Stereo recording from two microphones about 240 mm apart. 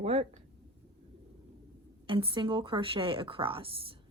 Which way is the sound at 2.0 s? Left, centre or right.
Right.